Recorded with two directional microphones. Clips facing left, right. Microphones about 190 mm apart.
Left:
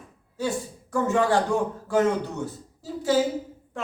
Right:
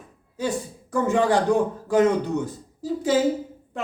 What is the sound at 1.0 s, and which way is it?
A man's voice, 15° right (ahead or behind).